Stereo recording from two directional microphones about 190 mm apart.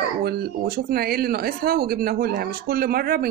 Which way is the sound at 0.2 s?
55° right (ahead or behind).